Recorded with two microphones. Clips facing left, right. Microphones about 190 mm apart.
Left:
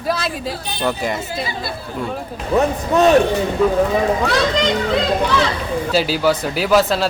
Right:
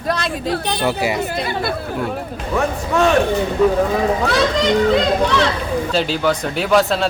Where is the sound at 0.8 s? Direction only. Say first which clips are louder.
Left 1 dB; 10° right (ahead or behind).